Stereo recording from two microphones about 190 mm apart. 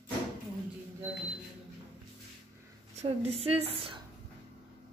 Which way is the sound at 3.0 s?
35° right (ahead or behind).